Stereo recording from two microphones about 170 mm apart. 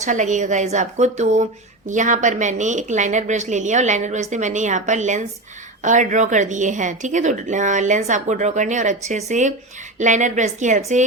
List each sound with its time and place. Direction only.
0.0 s a woman's voice: 45° right (ahead or behind)